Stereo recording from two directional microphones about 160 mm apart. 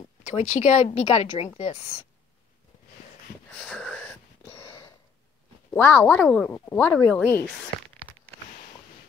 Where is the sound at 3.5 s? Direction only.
5° left (ahead or behind).